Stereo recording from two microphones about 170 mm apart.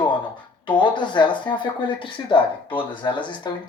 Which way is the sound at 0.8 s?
25° left (ahead or behind).